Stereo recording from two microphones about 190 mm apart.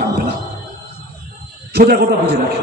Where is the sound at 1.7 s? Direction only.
55° right (ahead or behind).